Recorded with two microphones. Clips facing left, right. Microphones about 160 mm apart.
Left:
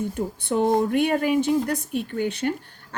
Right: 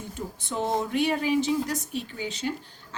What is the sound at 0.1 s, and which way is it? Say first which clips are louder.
Speech: left 8 dB; 55° left (ahead or behind).